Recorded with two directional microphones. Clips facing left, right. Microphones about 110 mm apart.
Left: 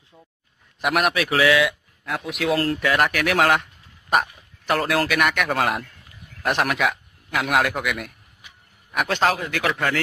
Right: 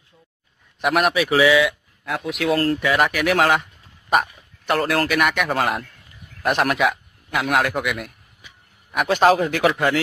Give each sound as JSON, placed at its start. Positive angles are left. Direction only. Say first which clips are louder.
{"t": 0.7, "sound": "a man's voice", "louder": "right 2 dB", "side_deg": 0}